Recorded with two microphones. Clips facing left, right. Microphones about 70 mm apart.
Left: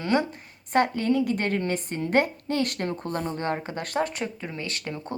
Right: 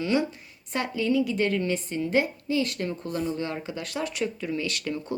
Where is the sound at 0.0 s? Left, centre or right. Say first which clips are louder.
Left 1 dB; left.